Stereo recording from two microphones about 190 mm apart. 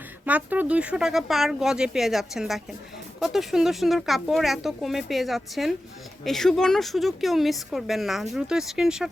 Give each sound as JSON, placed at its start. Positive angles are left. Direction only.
{"t": 0.3, "sound": "speech", "side_deg": -10}